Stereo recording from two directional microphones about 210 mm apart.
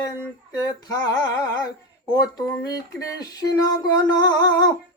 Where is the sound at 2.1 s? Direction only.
15° left (ahead or behind).